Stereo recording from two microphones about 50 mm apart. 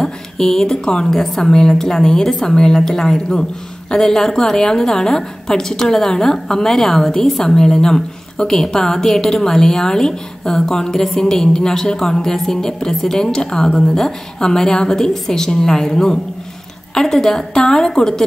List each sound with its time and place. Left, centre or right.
0.0 s a woman's voice: centre